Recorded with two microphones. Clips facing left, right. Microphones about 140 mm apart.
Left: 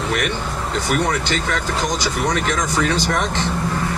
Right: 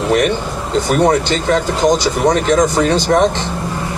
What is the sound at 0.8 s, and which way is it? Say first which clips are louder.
Speech: right 8 dB; 30° right (ahead or behind).